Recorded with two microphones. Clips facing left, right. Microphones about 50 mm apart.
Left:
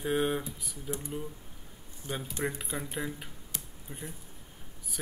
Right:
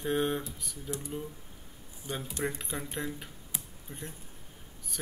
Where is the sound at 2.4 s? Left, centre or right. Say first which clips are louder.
Even; centre.